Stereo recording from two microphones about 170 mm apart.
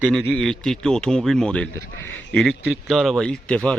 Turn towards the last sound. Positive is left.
turn(degrees=5)  # may be behind; listen again after turning